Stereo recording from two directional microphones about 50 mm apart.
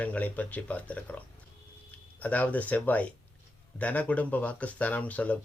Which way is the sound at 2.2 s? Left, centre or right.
Left.